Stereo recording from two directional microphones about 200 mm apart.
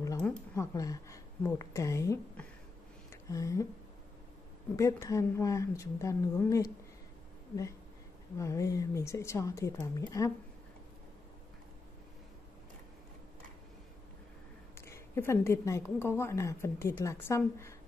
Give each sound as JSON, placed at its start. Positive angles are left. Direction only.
{"t": 0.6, "sound": "a woman's voice", "side_deg": 15}
{"t": 3.1, "sound": "a sound", "side_deg": 15}
{"t": 4.7, "sound": "a woman's voice", "side_deg": 15}
{"t": 8.4, "sound": "a woman's voice", "side_deg": 15}
{"t": 14.9, "sound": "a woman's voice", "side_deg": 10}